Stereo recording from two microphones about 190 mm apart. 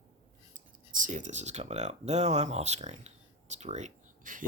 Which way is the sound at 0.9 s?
45° right (ahead or behind).